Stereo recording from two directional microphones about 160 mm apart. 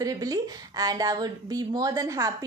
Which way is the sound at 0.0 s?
20° right (ahead or behind).